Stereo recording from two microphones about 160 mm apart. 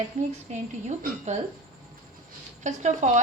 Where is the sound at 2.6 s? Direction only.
50° right (ahead or behind).